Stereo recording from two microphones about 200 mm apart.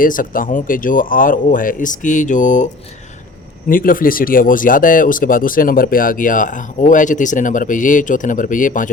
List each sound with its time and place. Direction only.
0.0 s speech: 45° left (ahead or behind)
3.7 s speech: 45° left (ahead or behind)